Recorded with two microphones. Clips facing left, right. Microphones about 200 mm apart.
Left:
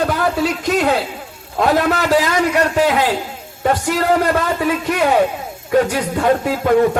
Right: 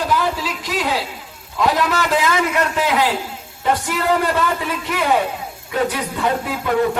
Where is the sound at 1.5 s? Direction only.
45° left (ahead or behind).